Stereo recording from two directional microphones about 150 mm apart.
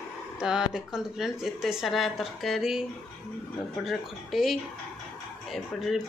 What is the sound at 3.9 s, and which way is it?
Speech, centre (ahead or behind).